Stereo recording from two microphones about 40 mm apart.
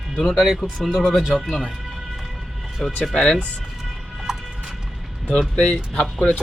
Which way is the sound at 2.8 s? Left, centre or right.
Centre.